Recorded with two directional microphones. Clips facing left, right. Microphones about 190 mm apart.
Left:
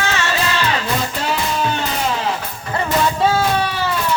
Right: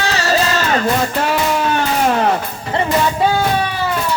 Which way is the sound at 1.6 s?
55° right (ahead or behind).